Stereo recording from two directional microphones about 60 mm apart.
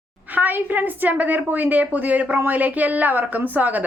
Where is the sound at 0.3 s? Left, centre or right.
Right.